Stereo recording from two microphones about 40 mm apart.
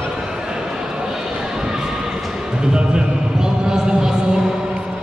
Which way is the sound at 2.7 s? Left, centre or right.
Centre.